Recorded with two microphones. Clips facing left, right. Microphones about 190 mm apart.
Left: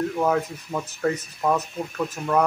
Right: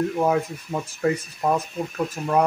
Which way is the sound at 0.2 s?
15° right (ahead or behind).